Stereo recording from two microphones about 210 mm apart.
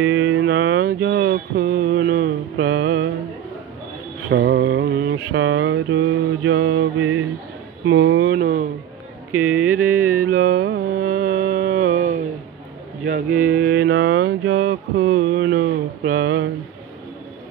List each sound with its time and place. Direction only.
0.0 s mantra: 70° right (ahead or behind); by 2.1 s 45° right (ahead or behind)
2.6 s music: 50° right (ahead or behind)
4.3 s mantra: 50° right (ahead or behind); by 7.2 s 70° right (ahead or behind)
7.8 s a sound: 65° right (ahead or behind)
9.3 s a sound: 10° right (ahead or behind)
10.1 s music: 90° right
10.4 s carnatic music: 45° right (ahead or behind)
13.0 s a sound: 40° right (ahead or behind)
14.7 s mantra: 50° right (ahead or behind)
15.1 s mantra: 65° right (ahead or behind)